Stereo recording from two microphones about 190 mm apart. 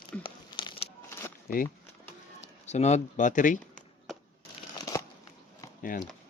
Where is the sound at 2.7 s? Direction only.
35° left (ahead or behind).